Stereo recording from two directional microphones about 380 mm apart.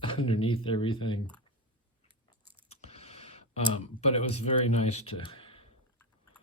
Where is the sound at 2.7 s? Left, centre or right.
Centre.